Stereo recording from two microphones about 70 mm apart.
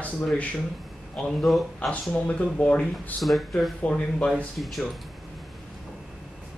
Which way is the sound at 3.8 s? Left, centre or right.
Centre.